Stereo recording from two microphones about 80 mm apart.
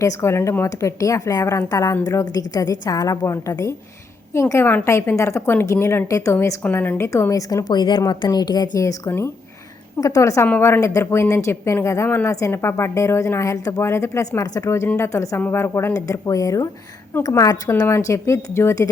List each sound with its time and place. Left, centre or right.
0.0 s a woman's voice: left
2.2 s a woman's voice: left
3.2 s a woman's voice: left
6.6 s a woman's voice: left
7.1 s a woman's voice: left
7.7 s a woman's voice: left
9.0 s a woman's voice: left
10.0 s a woman's voice: left
10.4 s a woman's voice: left
10.8 s a woman's voice: left
15.4 s a woman's voice: left
15.9 s a woman's voice: left
17.8 s a woman's voice: left